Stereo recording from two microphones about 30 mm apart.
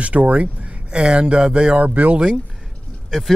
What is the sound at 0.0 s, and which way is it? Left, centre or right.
Speech, right.